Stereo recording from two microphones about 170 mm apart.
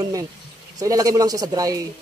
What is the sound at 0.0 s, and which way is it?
Speech, 20° right (ahead or behind).